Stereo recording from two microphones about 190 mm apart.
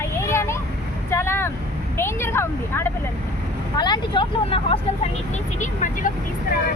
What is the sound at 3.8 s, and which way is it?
Speech, 25° left (ahead or behind).